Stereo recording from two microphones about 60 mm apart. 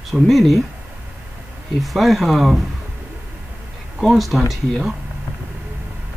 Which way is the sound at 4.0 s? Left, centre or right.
Centre.